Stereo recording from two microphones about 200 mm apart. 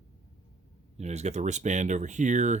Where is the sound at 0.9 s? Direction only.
35° right (ahead or behind).